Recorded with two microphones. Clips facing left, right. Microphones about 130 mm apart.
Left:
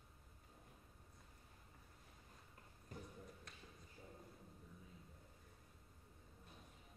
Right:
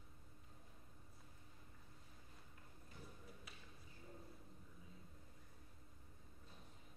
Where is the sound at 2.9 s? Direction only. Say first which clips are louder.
Left 6 dB; 45° left (ahead or behind).